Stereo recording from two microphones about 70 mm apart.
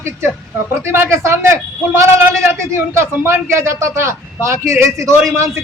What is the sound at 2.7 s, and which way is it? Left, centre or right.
A man's voice, right.